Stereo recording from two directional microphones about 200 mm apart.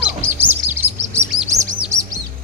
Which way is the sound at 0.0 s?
10° right (ahead or behind).